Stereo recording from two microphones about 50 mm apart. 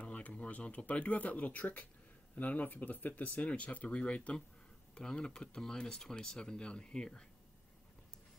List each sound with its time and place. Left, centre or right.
0.0 s speech: left